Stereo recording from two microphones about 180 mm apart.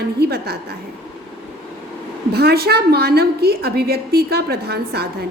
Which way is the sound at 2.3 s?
65° right (ahead or behind).